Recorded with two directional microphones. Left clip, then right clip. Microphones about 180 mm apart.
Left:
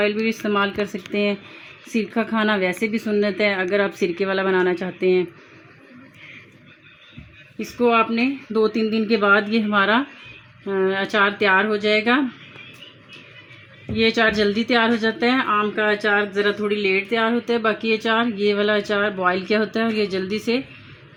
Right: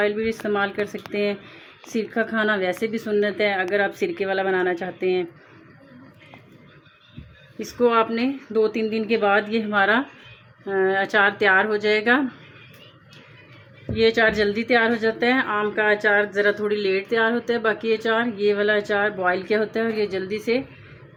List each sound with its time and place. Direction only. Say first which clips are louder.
0.0 s speech: left 1 dB; 50° left (ahead or behind)
7.9 s speech: left 2 dB; 45° left (ahead or behind)
13.9 s speech: even; 45° left (ahead or behind)